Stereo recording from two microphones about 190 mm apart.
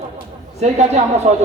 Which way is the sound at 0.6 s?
35° right (ahead or behind).